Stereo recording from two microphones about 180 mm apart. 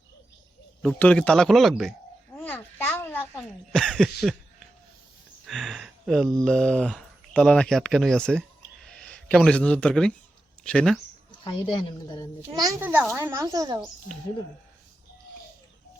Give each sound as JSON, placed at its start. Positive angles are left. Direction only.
{"t": 0.8, "sound": "speech", "side_deg": 5}
{"t": 2.3, "sound": "cough", "side_deg": 10}
{"t": 5.5, "sound": "a sound", "side_deg": 0}
{"t": 6.4, "sound": "speech", "side_deg": 5}
{"t": 11.4, "sound": "speech", "side_deg": 25}
{"t": 12.8, "sound": "a child's voice", "side_deg": -10}